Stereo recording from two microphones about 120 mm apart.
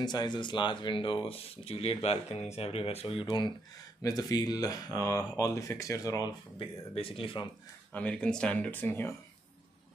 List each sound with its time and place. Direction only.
0.0 s speech: 35° left (ahead or behind); by 3.3 s 55° left (ahead or behind)
3.3 s speech: 40° left (ahead or behind)
6.6 s speech: 50° left (ahead or behind)
7.9 s speech: 10° left (ahead or behind)